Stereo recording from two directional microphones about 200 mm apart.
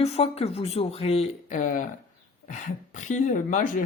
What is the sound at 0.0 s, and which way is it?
Speech, 30° left (ahead or behind).